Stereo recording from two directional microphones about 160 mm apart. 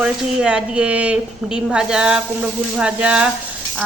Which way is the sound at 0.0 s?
5° right (ahead or behind).